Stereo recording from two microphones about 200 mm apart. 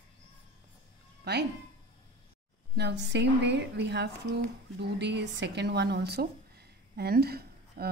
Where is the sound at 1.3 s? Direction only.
55° right (ahead or behind).